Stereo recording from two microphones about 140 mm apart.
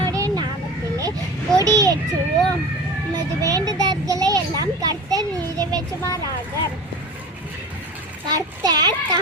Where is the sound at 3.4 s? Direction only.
25° right (ahead or behind).